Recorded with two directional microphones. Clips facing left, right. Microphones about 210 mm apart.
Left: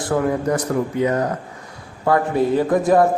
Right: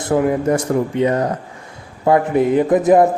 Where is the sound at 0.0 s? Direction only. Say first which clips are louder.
Right 3 dB; 15° right (ahead or behind).